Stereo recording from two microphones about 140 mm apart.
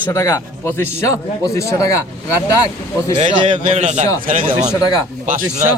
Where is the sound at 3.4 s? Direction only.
55° right (ahead or behind).